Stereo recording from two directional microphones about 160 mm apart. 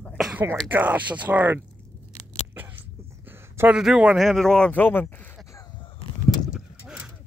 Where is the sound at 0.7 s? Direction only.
10° right (ahead or behind).